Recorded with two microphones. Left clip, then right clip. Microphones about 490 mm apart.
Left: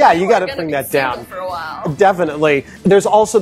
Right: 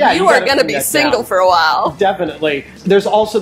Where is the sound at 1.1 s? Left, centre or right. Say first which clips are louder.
Right 12 dB; right.